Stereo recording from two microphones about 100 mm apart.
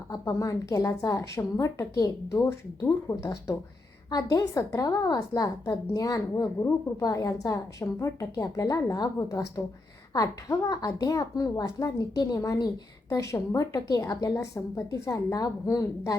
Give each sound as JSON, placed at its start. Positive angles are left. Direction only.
{"t": 0.1, "sound": "a woman's voice", "side_deg": 35}